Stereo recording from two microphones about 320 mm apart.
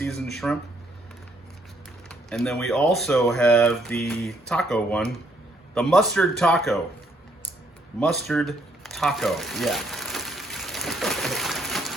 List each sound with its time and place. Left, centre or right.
0.0 s speech: centre
2.0 s speech: centre
7.9 s a sound: centre